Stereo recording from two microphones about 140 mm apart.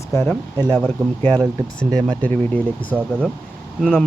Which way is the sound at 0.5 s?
30° right (ahead or behind).